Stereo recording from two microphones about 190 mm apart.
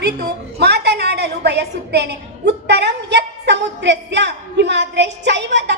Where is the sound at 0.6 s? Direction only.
60° right (ahead or behind).